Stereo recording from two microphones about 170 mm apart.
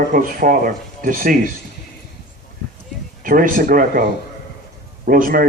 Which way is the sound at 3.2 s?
55° right (ahead or behind).